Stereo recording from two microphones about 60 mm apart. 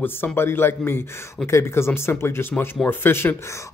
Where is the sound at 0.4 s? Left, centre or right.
Left.